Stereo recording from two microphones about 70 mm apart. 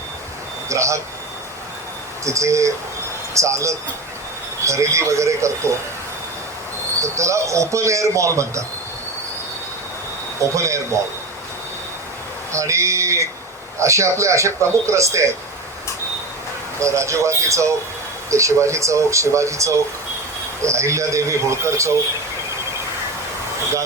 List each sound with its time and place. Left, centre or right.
0.7 s a man's voice: right
2.2 s a man's voice: right
7.0 s a man's voice: right
10.5 s a man's voice: right
12.5 s a man's voice: right
16.8 s a man's voice: right